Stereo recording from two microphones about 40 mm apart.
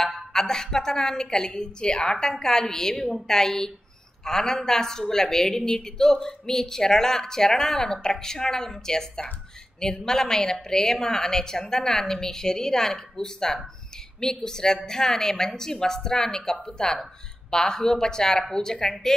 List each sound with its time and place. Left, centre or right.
0.0 s a woman's voice: centre